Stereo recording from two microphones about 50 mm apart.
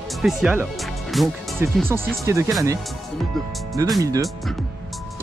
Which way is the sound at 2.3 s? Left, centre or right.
Right.